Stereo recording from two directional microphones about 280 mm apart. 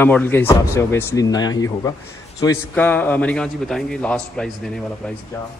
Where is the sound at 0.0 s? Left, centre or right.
Centre.